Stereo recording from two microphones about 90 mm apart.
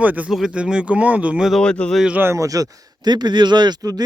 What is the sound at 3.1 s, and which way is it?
Speech, 55° right (ahead or behind).